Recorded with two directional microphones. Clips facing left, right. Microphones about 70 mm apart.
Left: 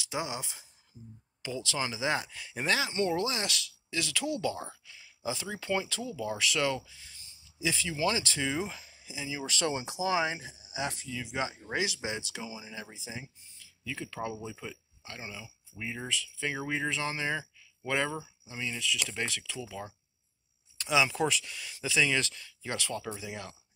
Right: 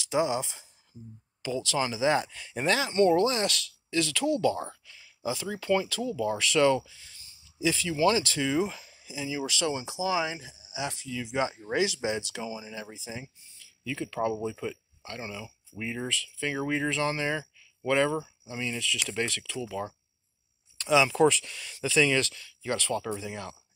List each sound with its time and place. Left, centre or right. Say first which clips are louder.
0.1 s speech: right 9 dB; centre
1.4 s speech: right 5 dB; centre
7.6 s speech: right 6 dB; centre
9.5 s speech: right 2 dB; left
11.4 s speech: right 5 dB; centre
11.7 s speech: right 6 dB; centre
14.2 s speech: right 8 dB; right
14.5 s speech: right 7 dB; centre
15.0 s speech: right 5 dB; centre
18.1 s speech: right 7 dB; right
18.8 s speech: right 2 dB; centre
20.7 s speech: right 4 dB; centre